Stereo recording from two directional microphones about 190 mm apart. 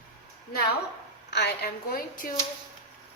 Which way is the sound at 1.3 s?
60° left (ahead or behind).